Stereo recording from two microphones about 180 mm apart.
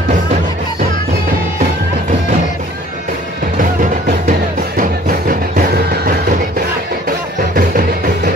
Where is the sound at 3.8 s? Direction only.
45° right (ahead or behind).